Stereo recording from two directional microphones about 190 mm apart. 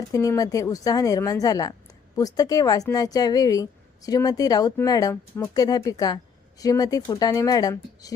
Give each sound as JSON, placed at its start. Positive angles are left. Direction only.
{"t": 0.1, "sound": "a woman's voice", "side_deg": 15}